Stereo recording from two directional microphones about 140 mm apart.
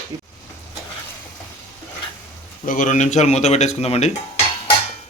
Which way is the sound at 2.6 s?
65° left (ahead or behind).